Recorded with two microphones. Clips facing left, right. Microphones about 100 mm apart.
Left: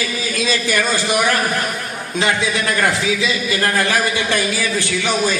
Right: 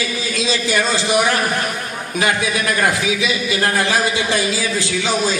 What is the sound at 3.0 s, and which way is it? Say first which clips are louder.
A man's voice: even; 20° right (ahead or behind).